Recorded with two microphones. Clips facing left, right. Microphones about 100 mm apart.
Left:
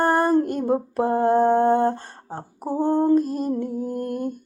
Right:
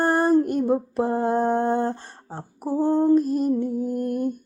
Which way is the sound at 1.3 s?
50° left (ahead or behind).